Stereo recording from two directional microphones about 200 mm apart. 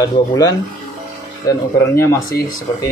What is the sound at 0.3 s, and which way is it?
Speech, 15° left (ahead or behind).